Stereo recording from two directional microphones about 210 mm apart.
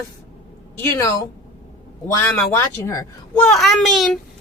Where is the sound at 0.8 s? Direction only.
10° left (ahead or behind).